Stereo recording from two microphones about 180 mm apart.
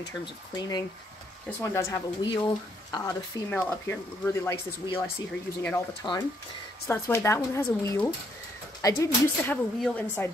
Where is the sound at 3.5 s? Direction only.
10° left (ahead or behind).